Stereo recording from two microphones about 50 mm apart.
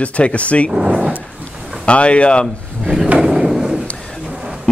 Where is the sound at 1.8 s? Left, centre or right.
Left.